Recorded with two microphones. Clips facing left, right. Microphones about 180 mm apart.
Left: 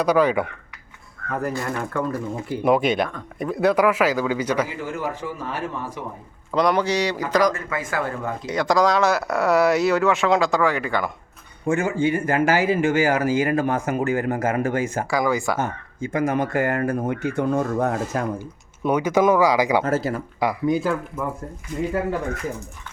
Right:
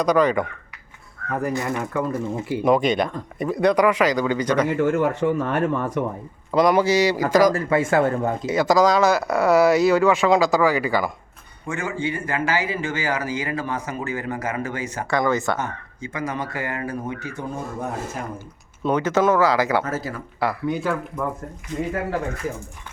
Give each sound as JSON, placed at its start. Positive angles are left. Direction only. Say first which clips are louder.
{"t": 0.0, "sound": "speech", "louder": "even", "side_deg": 10}
{"t": 1.3, "sound": "a man's voice", "louder": "right 1 dB", "side_deg": -10}
{"t": 4.8, "sound": "speech", "louder": "right 8 dB", "side_deg": -65}
{"t": 6.5, "sound": "a man's voice", "louder": "right 3 dB", "side_deg": -5}
{"t": 7.5, "sound": "speech", "louder": "right 8 dB", "side_deg": -30}
{"t": 8.4, "sound": "speech", "louder": "right 2 dB", "side_deg": -5}
{"t": 11.6, "sound": "a man's voice", "louder": "left 6 dB", "side_deg": 45}
{"t": 15.1, "sound": "speech", "louder": "right 2 dB", "side_deg": 5}
{"t": 16.0, "sound": "a man's voice", "louder": "left 6 dB", "side_deg": 50}
{"t": 18.8, "sound": "speech", "louder": "left 1 dB", "side_deg": 10}